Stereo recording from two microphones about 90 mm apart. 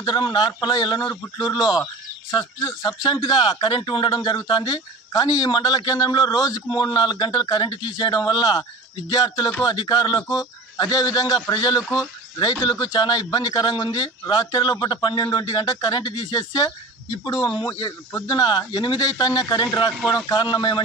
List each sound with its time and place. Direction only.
0.0 s speech: 55° left (ahead or behind)
2.6 s speech: 30° left (ahead or behind)
2.9 s a man's voice: 60° left (ahead or behind); by 6.6 s 40° left (ahead or behind)
6.7 s a man's voice: 50° left (ahead or behind)